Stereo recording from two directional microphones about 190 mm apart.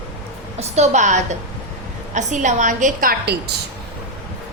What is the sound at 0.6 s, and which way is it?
A woman's voice, 35° right (ahead or behind).